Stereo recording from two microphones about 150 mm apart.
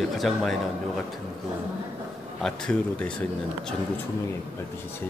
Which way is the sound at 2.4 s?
5° left (ahead or behind).